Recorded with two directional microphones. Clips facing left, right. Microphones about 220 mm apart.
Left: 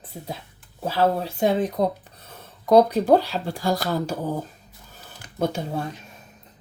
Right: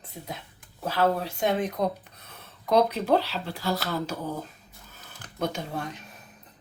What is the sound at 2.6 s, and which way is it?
Speech, 45° left (ahead or behind).